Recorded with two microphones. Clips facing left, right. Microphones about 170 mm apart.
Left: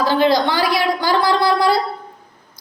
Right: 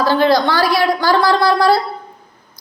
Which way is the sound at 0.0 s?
15° left (ahead or behind).